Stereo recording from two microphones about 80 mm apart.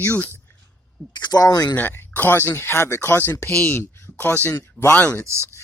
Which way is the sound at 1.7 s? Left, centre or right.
Left.